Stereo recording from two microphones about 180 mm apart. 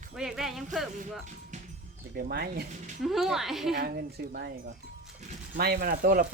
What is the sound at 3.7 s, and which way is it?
Speech, 60° right (ahead or behind).